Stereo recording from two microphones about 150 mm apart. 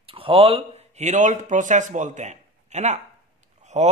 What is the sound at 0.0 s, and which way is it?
Speech, 40° right (ahead or behind).